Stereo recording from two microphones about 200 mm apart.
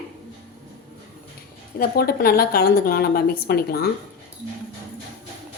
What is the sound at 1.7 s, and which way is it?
A woman's voice, 50° left (ahead or behind).